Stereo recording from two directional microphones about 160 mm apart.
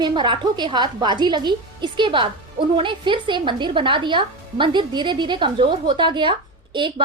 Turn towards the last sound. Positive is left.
turn(degrees=-30)  # may be behind; listen again after turning